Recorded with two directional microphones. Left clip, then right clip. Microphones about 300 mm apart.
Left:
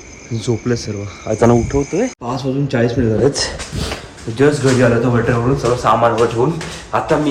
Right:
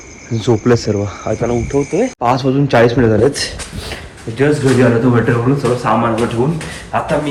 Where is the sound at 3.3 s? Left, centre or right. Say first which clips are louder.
Left 1 dB; left.